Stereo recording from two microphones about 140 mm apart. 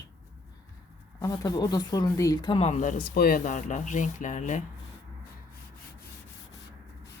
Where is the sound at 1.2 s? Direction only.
25° left (ahead or behind).